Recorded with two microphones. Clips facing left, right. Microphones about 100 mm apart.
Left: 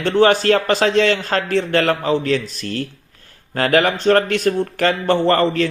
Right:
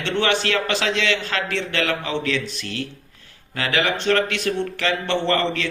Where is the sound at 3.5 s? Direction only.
45° left (ahead or behind).